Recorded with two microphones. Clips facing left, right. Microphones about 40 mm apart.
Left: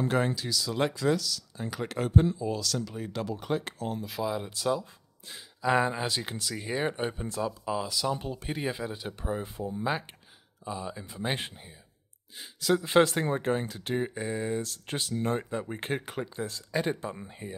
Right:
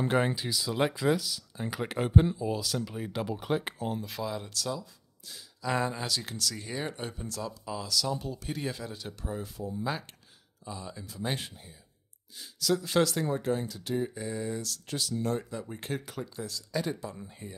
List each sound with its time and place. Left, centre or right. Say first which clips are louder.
0.0 s speech: even; centre
4.0 s speech: left 3 dB; centre; by 17.6 s left